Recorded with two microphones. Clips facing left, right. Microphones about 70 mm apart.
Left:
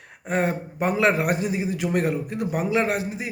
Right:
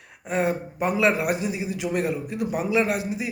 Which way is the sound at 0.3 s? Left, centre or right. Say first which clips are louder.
Even; left.